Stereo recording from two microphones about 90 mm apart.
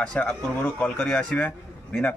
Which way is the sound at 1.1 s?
5° left (ahead or behind).